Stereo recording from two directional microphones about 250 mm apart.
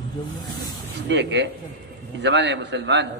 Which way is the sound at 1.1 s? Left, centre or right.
Right.